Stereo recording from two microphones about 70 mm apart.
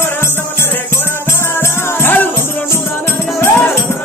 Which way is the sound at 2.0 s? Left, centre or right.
Left.